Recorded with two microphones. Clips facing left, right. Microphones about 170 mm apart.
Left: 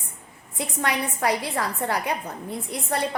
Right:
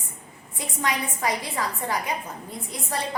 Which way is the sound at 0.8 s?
65° left (ahead or behind).